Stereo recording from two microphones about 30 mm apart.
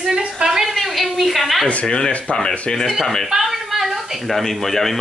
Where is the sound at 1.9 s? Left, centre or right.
Left.